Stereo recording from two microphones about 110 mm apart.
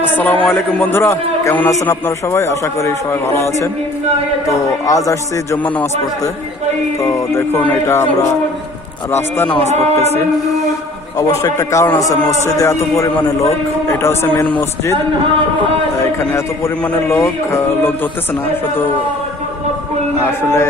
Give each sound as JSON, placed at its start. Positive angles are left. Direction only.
{"t": 0.0, "sound": "a man's voice", "side_deg": 15}
{"t": 7.0, "sound": "a man's voice", "side_deg": 25}
{"t": 9.1, "sound": "a man's voice", "side_deg": 15}
{"t": 11.2, "sound": "a man's voice", "side_deg": 30}
{"t": 17.1, "sound": "a man's voice", "side_deg": 20}
{"t": 20.2, "sound": "a man's voice", "side_deg": 25}